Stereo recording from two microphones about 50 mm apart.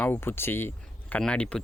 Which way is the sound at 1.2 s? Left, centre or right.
Left.